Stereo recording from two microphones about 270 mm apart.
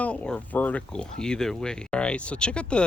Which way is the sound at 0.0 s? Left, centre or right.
Centre.